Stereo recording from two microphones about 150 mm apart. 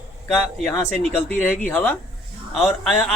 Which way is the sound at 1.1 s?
15° left (ahead or behind).